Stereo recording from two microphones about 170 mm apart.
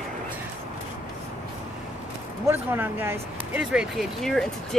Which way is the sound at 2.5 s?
10° right (ahead or behind).